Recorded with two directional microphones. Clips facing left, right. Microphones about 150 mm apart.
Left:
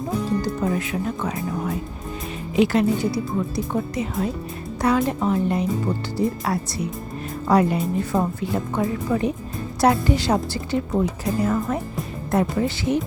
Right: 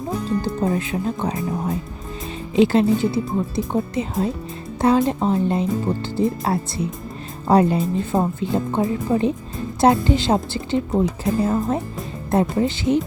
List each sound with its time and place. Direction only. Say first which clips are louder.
0.4 s speech: right 2 dB; 30° right (ahead or behind)